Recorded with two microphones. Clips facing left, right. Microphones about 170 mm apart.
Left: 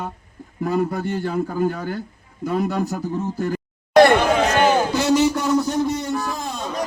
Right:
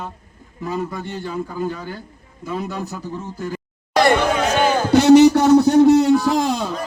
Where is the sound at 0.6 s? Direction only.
60° left (ahead or behind).